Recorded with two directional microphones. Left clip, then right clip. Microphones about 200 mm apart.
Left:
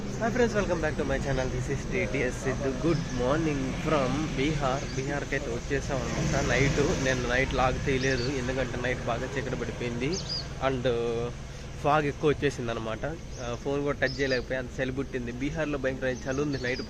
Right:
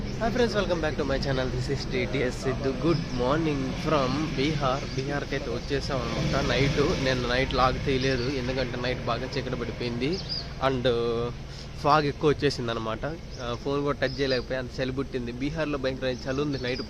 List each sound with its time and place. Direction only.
0.2 s speech: 5° right (ahead or behind)
10.6 s speech: 25° right (ahead or behind)